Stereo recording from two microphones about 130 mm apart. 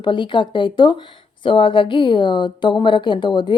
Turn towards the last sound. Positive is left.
turn(degrees=35)  # may be behind; listen again after turning